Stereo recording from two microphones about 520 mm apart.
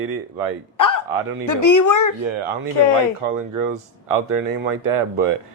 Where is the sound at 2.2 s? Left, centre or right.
Right.